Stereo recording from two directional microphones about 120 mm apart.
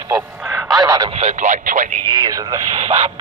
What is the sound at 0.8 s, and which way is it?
Speech, 35° right (ahead or behind).